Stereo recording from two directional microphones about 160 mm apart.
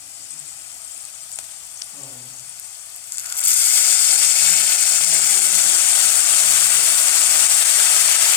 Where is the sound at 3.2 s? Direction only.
10° left (ahead or behind).